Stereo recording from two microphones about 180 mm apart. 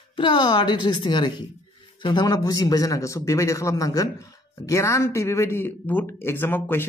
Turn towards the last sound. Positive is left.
turn(degrees=10)  # may be behind; listen again after turning